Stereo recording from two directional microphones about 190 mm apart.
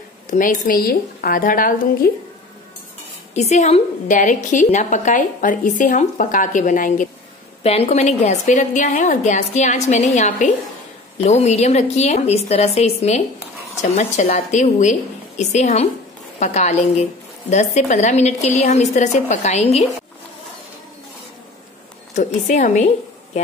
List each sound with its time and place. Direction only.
0.3 s speech: 45° left (ahead or behind)
3.3 s a woman's voice: 35° left (ahead or behind)
7.6 s a woman's voice: 30° left (ahead or behind)
22.1 s a woman's voice: 40° left (ahead or behind)